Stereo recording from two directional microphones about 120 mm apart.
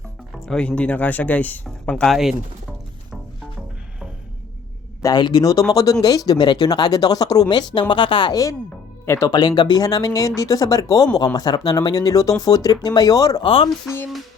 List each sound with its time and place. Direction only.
0.3 s speech: 5° left (ahead or behind)
5.0 s speech: 35° left (ahead or behind)
9.0 s speech: 20° left (ahead or behind)
9.3 s speech: 35° left (ahead or behind)
13.4 s speech: 50° left (ahead or behind)